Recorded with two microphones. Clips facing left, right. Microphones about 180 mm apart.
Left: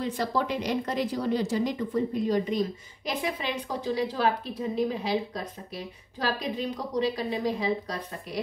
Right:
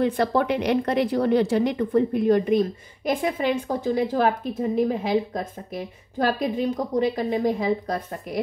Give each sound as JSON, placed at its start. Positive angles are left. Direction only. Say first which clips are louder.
{"t": 0.0, "sound": "a woman's voice", "louder": "right 7 dB", "side_deg": -60}